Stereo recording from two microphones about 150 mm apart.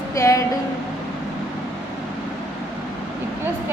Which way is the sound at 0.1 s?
20° left (ahead or behind).